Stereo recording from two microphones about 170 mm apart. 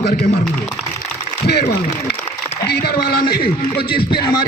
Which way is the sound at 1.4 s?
65° left (ahead or behind).